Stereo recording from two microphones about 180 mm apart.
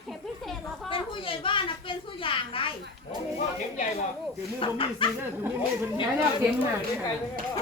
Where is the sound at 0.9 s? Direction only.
30° left (ahead or behind).